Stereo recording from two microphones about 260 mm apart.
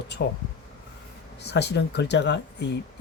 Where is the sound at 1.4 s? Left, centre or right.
Left.